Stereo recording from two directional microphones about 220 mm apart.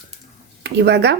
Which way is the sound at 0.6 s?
50° right (ahead or behind).